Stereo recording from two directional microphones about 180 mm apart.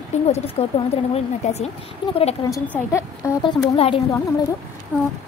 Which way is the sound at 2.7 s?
15° left (ahead or behind).